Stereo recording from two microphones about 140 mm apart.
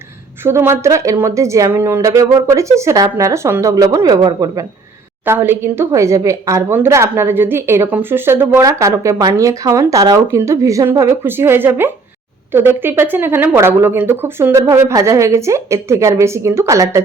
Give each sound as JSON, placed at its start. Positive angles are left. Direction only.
{"t": 0.4, "sound": "a woman's voice", "side_deg": -15}
{"t": 5.2, "sound": "a woman's voice", "side_deg": -15}